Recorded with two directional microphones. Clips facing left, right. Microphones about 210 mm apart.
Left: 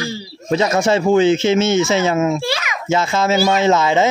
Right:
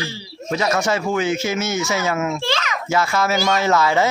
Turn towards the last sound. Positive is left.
turn(degrees=20)  # may be behind; listen again after turning